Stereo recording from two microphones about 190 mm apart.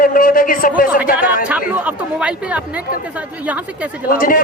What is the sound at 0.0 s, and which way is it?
A man's voice, 45° left (ahead or behind).